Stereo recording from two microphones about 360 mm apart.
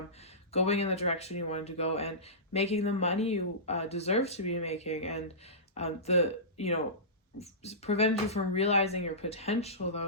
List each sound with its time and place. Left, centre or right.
0.5 s speech: centre